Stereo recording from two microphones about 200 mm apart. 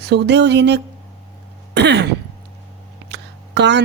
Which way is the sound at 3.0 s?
60° right (ahead or behind).